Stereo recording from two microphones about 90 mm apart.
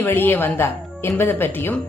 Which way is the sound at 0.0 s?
25° left (ahead or behind).